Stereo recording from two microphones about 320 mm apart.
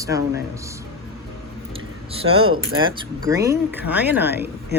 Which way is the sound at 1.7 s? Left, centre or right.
Centre.